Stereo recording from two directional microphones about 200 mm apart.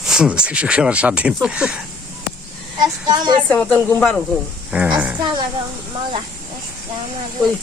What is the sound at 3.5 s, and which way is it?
Speech, 5° left (ahead or behind).